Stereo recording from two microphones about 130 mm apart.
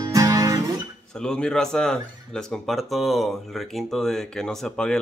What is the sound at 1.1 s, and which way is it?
Speech, 5° left (ahead or behind).